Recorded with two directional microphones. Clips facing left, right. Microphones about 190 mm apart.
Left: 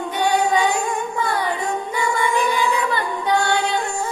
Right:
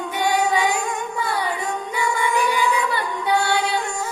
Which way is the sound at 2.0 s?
10° right (ahead or behind).